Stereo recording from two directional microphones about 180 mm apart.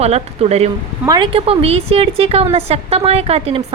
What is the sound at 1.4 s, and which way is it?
A woman's voice, 35° right (ahead or behind).